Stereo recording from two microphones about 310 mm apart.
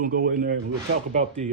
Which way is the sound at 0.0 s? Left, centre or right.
Right.